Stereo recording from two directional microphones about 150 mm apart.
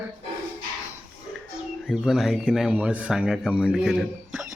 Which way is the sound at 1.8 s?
5° right (ahead or behind).